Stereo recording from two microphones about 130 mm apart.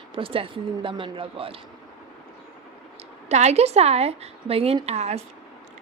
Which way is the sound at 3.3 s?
60° right (ahead or behind).